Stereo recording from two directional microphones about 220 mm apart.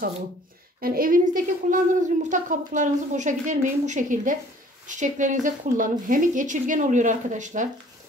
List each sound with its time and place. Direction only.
0.7 s a woman's voice: 40° right (ahead or behind)